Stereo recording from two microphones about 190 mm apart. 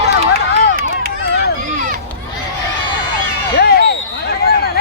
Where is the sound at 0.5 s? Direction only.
55° left (ahead or behind).